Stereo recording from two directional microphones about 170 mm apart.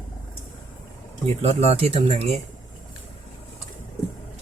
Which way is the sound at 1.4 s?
35° right (ahead or behind).